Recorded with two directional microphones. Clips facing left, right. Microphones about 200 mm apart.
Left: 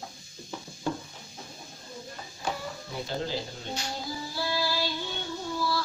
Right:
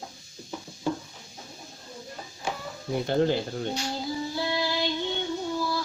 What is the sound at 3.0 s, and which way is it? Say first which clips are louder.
Speech: right 9 dB; 60° right (ahead or behind).